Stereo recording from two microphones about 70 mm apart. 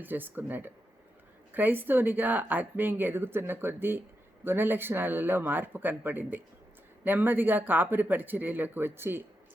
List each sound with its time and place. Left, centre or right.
0.0 s a woman's voice: right